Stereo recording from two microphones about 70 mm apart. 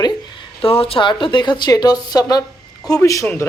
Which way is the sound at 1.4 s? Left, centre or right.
Left.